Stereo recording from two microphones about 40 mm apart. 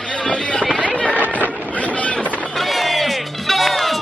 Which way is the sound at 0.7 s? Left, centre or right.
Left.